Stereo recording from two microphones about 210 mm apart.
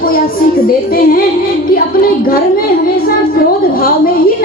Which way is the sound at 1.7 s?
45° left (ahead or behind).